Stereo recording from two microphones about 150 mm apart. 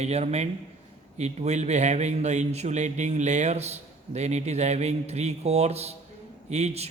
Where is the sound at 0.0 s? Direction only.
45° right (ahead or behind).